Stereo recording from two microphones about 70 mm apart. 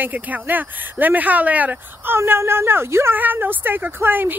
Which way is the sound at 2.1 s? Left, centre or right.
Right.